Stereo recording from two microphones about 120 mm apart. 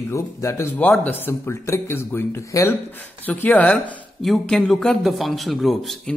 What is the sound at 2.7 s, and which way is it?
Speech, 15° left (ahead or behind).